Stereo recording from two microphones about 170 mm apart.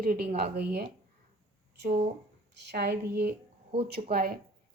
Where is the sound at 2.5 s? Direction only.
85° right; by 4.4 s 60° right (ahead or behind).